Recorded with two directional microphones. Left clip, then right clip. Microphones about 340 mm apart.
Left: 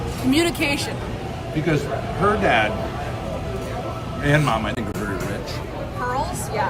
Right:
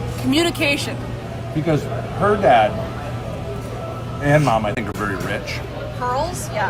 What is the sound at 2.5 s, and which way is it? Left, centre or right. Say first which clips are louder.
Speech: right 7 dB; centre.